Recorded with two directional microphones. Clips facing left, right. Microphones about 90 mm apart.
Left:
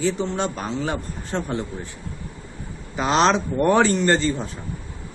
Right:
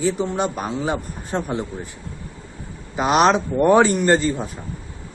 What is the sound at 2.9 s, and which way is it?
A man's voice, 15° right (ahead or behind).